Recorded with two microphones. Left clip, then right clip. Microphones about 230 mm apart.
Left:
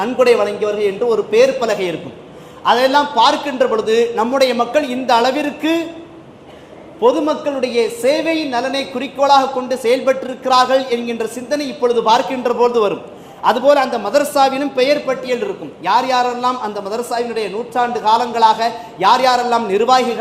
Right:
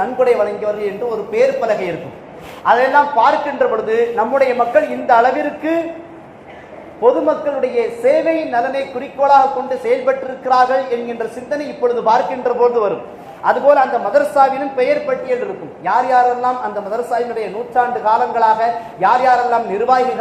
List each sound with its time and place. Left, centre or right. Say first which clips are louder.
0.0 s a man's voice: left 1 dB; left
7.0 s a woman's voice: right 1 dB; left